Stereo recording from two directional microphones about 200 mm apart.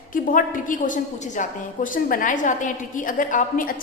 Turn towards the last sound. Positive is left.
turn(degrees=45)  # may be behind; listen again after turning